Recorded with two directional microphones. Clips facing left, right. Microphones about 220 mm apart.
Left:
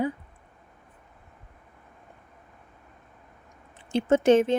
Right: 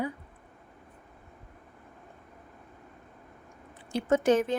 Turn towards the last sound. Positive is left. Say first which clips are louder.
# left 5 dB
turn(degrees=25)  # may be behind; listen again after turning